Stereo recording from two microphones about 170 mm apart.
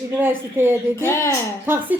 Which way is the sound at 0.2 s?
10° right (ahead or behind).